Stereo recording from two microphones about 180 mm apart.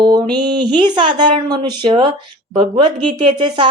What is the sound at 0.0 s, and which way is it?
Speech, 20° right (ahead or behind).